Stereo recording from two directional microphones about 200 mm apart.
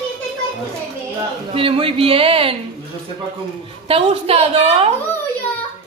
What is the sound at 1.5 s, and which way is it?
Speech, 25° right (ahead or behind).